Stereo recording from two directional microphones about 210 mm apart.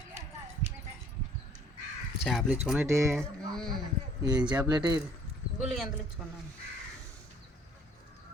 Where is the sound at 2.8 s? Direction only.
15° right (ahead or behind).